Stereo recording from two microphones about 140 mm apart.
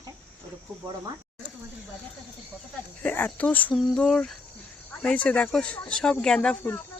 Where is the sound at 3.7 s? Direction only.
5° left (ahead or behind).